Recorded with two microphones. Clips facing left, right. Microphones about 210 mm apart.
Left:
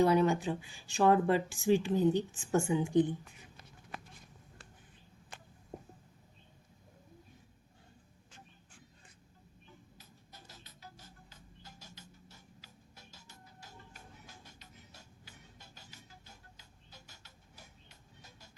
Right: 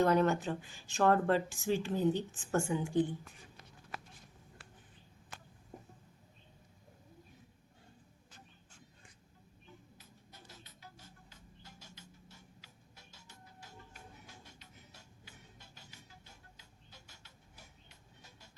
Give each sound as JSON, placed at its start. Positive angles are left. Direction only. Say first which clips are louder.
{"t": 0.0, "sound": "a woman's voice", "louder": "left 2 dB", "side_deg": 10}
{"t": 10.0, "sound": "music", "louder": "left 1 dB", "side_deg": 40}